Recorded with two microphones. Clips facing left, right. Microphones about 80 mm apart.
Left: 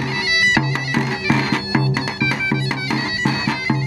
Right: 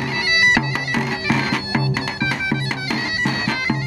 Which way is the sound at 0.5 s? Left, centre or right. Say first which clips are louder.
Left 1 dB; centre.